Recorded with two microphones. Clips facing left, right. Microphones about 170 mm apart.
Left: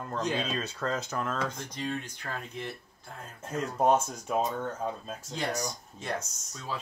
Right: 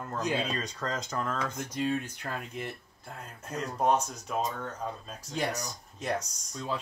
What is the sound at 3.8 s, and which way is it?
Speech, 5° left (ahead or behind).